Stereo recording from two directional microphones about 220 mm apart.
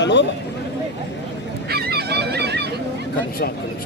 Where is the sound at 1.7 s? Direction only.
45° right (ahead or behind).